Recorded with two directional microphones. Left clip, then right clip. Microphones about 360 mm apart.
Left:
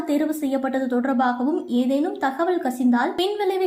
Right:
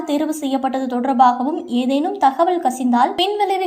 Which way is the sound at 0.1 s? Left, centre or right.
Right.